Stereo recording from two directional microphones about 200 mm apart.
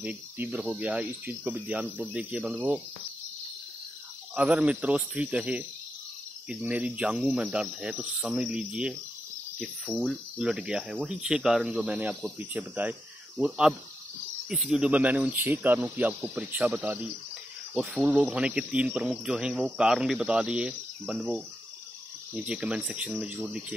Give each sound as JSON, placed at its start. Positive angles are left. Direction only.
{"t": 0.0, "sound": "speech", "side_deg": -10}
{"t": 4.4, "sound": "speech", "side_deg": -5}